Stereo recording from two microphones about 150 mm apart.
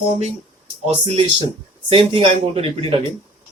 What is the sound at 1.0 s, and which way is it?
Speech, 40° right (ahead or behind).